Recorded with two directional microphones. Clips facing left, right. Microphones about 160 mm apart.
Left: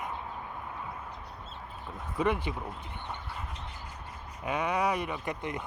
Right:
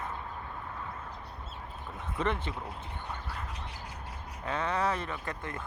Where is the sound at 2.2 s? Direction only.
10° left (ahead or behind).